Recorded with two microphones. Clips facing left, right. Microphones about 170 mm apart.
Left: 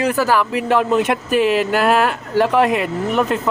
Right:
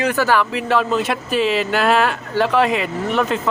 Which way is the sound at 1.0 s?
55° left (ahead or behind).